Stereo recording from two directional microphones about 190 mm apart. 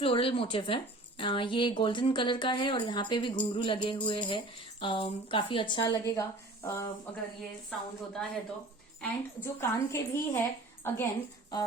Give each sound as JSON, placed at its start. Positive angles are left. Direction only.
{"t": 0.0, "sound": "a woman's voice", "side_deg": 30}
{"t": 7.7, "sound": "a woman's voice", "side_deg": 5}
{"t": 9.0, "sound": "a woman's voice", "side_deg": 15}